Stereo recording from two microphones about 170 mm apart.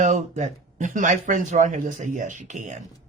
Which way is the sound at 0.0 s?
45° right (ahead or behind).